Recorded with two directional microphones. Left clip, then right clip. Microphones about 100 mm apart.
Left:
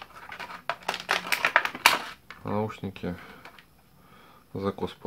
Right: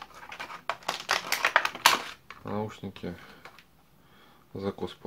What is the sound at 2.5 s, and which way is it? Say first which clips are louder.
Speech: left 4 dB; 35° left (ahead or behind).